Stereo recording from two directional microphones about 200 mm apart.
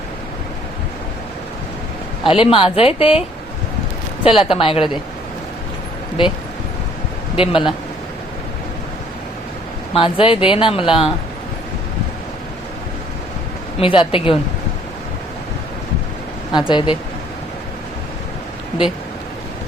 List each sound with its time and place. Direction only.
2.4 s speech: 25° left (ahead or behind)
7.3 s speech: 25° left (ahead or behind)
9.9 s speech: 25° left (ahead or behind)
13.7 s speech: 25° left (ahead or behind)
16.5 s speech: 20° left (ahead or behind)